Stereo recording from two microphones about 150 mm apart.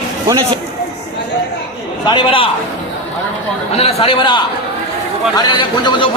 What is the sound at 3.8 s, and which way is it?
A man's voice, 40° left (ahead or behind).